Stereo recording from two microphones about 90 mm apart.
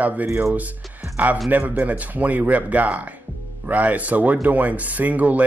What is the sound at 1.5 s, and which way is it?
Speech, 20° right (ahead or behind).